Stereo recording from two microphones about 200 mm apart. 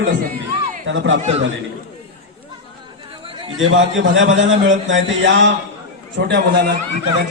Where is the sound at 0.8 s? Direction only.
70° right (ahead or behind).